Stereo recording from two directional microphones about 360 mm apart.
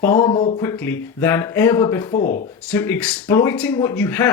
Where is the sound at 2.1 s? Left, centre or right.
Left.